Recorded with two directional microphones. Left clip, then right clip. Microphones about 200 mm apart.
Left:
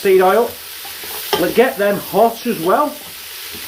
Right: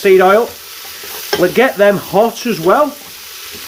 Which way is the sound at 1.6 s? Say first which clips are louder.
Right 1 dB; 65° right (ahead or behind).